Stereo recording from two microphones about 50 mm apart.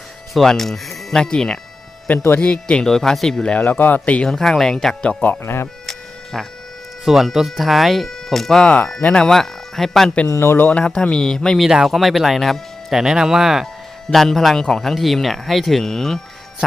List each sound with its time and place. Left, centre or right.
0.3 s speech: centre; by 2.8 s left
2.8 s speech: centre
3.5 s speech: left
4.3 s speech: centre
5.4 s speech: left
5.8 s music: centre
7.0 s speech: centre
10.2 s a man's voice: left
10.8 s speech: left
11.6 s speech: centre
14.1 s speech: centre